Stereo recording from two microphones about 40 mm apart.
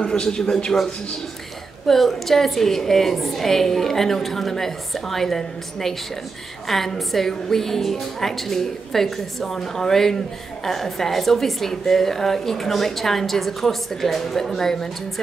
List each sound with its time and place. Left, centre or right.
0.0 s a man's voice: centre
1.9 s a woman's voice: centre